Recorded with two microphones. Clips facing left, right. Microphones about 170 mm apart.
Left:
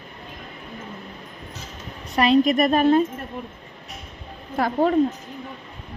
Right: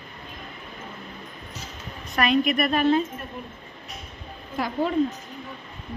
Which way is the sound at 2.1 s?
30° left (ahead or behind).